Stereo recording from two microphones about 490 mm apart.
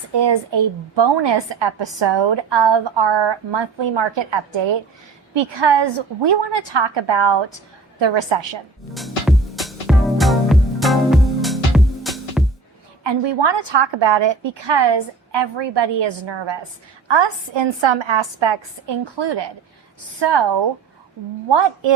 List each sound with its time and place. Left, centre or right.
0.1 s a woman's voice: right
8.9 s music: centre
13.0 s a woman's voice: right